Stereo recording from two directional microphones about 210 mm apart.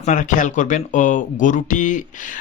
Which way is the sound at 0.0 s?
35° left (ahead or behind).